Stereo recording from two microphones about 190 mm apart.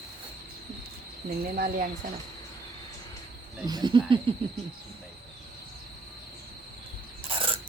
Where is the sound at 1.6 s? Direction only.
50° right (ahead or behind).